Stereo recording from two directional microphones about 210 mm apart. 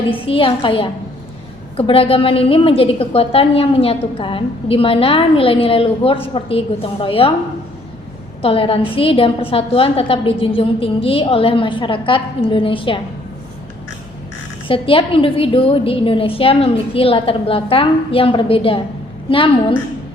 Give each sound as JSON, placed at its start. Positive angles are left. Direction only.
{"t": 0.1, "sound": "a woman's voice", "side_deg": 25}
{"t": 8.4, "sound": "a woman's voice", "side_deg": 25}
{"t": 14.7, "sound": "a woman's voice", "side_deg": 25}